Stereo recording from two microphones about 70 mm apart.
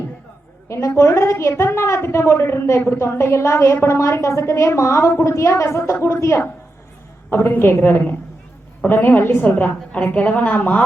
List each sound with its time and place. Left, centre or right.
0.7 s a woman's voice: left; by 10.8 s centre